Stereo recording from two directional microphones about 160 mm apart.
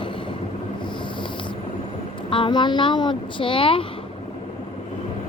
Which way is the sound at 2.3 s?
30° left (ahead or behind).